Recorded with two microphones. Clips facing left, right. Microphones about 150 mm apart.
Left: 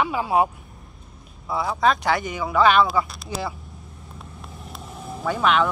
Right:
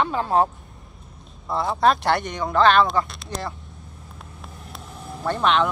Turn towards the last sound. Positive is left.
turn(degrees=5)  # may be behind; listen again after turning